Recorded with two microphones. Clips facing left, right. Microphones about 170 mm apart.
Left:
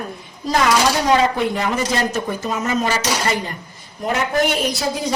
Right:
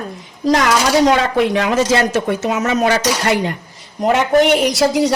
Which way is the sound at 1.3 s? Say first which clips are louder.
Right 6 dB; 80° right.